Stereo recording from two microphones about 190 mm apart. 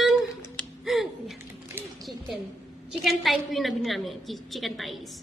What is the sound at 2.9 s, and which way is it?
A woman's voice, centre (ahead or behind).